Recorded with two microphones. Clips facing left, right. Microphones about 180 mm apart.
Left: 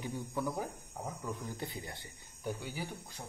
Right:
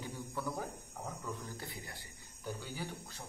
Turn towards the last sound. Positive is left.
turn(degrees=15)  # may be behind; listen again after turning